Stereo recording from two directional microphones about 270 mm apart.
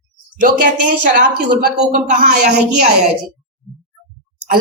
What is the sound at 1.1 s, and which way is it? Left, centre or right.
A woman's voice, right.